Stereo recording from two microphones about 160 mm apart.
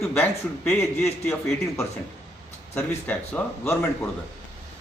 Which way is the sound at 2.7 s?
10° left (ahead or behind).